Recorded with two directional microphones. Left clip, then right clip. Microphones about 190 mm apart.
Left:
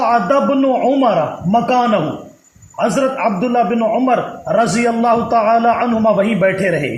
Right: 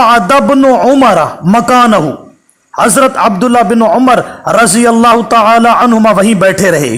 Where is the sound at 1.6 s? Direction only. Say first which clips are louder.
Right 10 dB; 45° right (ahead or behind).